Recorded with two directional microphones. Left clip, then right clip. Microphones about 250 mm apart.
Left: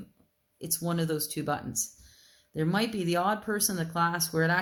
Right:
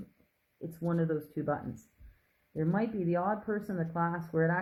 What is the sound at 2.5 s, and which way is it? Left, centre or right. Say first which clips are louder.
Speech: left 4 dB; left.